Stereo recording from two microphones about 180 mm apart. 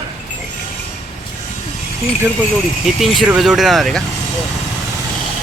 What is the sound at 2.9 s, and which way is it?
Speech, centre (ahead or behind).